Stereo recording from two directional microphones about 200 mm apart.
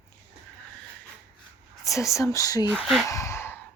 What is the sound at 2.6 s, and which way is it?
Speech, centre (ahead or behind).